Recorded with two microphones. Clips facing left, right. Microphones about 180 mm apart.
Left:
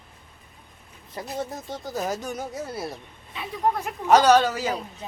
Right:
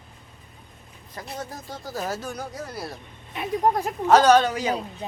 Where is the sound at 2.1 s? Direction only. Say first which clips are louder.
Left 1 dB; 15° left (ahead or behind).